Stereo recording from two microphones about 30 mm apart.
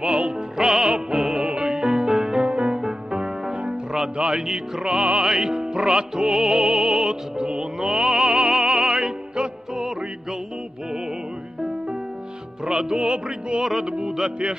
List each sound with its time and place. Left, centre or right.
0.0 s music: right
0.6 s music: right
0.8 s music: right
2.4 s music: right
2.7 s music: right
5.2 s music: right
12.6 s music: right